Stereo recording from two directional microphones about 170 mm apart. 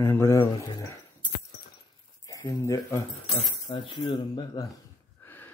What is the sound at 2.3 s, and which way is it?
Speech, 20° left (ahead or behind).